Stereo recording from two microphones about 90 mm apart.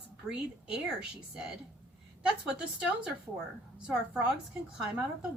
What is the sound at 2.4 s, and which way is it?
A woman's voice, 10° right (ahead or behind).